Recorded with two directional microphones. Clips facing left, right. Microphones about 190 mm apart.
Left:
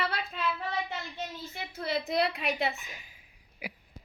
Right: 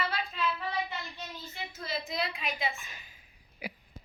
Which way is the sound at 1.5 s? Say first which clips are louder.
Left 5 dB; 60° left (ahead or behind).